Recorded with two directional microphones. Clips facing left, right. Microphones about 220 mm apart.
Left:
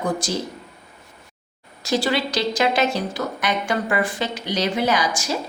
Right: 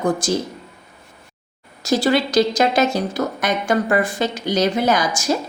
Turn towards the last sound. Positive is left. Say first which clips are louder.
# right 4 dB
turn(degrees=-45)  # may be behind; listen again after turning